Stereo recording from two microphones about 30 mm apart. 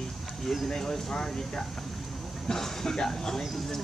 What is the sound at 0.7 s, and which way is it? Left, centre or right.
Speech, centre.